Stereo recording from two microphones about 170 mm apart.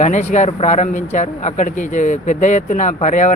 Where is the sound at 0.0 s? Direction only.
45° left (ahead or behind).